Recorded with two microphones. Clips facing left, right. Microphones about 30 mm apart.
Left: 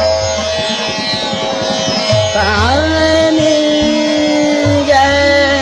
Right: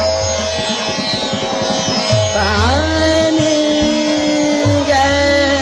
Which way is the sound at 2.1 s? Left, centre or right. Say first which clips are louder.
Left 3 dB; centre.